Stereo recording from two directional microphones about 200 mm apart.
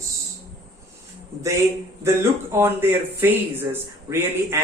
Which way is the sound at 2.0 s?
15° right (ahead or behind).